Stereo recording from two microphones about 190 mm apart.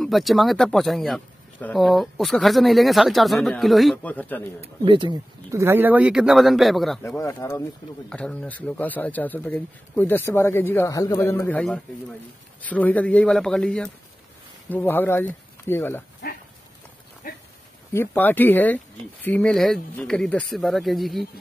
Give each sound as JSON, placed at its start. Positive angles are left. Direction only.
{"t": 0.0, "sound": "speech", "side_deg": 0}
{"t": 4.6, "sound": "speech", "side_deg": -25}
{"t": 7.0, "sound": "speech", "side_deg": 15}
{"t": 17.2, "sound": "dog", "side_deg": 50}
{"t": 17.9, "sound": "speech", "side_deg": 10}